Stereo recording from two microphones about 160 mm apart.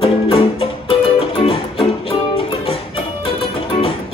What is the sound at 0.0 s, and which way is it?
Music, 35° left (ahead or behind).